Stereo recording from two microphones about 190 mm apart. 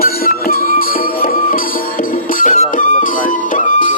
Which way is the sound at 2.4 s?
45° left (ahead or behind).